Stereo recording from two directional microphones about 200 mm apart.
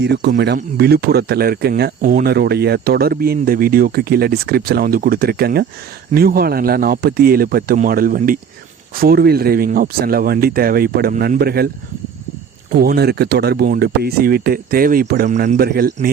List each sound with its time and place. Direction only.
0.0 s speech: 55° right (ahead or behind)
12.7 s speech: 50° right (ahead or behind)